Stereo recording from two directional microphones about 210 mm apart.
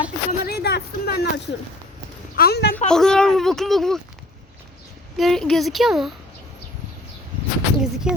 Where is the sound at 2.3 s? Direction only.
45° left (ahead or behind).